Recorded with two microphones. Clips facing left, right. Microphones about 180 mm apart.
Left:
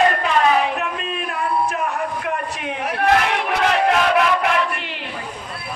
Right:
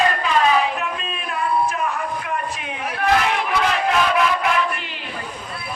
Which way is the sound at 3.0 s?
60° left (ahead or behind).